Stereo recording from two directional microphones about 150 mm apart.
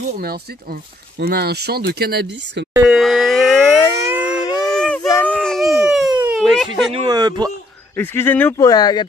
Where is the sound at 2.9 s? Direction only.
Centre (ahead or behind).